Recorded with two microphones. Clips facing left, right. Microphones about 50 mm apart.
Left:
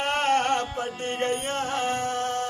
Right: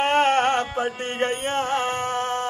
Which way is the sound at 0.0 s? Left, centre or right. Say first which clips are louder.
Right 5 dB; right.